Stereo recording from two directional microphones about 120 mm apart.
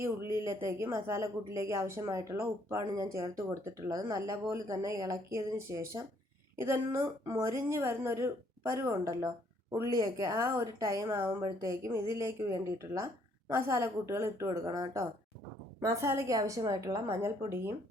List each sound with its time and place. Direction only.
0.0 s speech: 25° right (ahead or behind)